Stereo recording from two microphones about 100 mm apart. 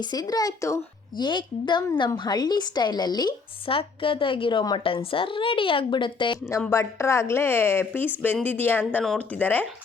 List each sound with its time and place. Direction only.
0.0 s speech: 40° left (ahead or behind)
1.1 s speech: 50° left (ahead or behind)
3.7 s speech: 65° left (ahead or behind)
6.7 s a woman's voice: 30° left (ahead or behind)